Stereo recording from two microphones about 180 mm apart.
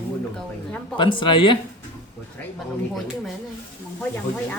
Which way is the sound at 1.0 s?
25° left (ahead or behind).